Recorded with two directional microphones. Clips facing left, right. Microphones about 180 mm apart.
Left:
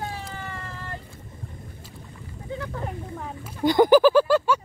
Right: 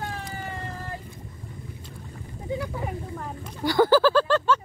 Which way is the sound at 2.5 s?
10° right (ahead or behind).